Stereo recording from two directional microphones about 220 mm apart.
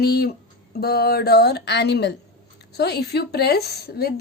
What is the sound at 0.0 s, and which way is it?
A woman's voice, 45° left (ahead or behind).